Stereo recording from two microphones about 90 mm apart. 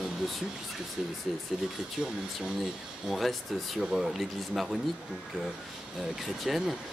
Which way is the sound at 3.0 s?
Centre (ahead or behind).